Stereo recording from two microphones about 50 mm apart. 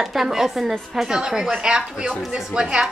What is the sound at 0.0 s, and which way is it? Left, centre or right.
Speech, centre.